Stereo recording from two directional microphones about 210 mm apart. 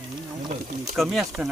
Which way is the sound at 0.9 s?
Centre (ahead or behind).